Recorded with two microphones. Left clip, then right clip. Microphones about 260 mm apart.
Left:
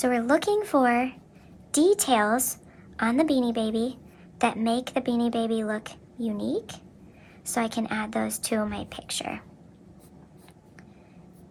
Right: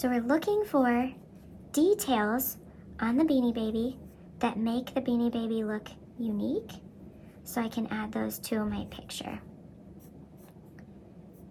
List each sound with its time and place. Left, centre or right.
0.0 s a woman's voice: left